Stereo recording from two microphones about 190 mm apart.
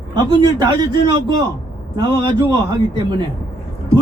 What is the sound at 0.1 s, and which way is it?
A man's voice, 25° right (ahead or behind).